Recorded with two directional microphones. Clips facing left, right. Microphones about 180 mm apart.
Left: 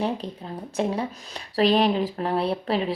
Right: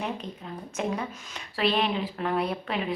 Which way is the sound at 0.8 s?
35° left (ahead or behind).